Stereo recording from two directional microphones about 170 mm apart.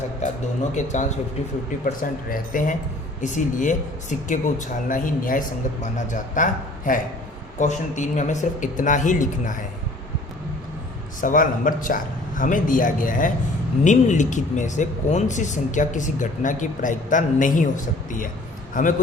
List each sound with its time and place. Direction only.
0.2 s speech: 45° left (ahead or behind)
2.3 s speech: 55° left (ahead or behind)
11.2 s a man's voice: 50° left (ahead or behind)